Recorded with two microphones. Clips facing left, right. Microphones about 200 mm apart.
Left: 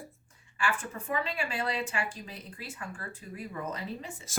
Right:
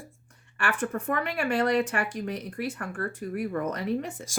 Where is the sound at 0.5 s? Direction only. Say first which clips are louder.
Right 5 dB; 65° right (ahead or behind).